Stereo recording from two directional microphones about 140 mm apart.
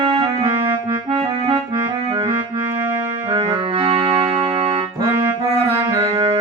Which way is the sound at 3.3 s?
40° right (ahead or behind).